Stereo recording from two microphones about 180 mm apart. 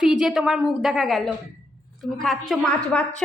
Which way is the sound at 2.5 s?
5° left (ahead or behind).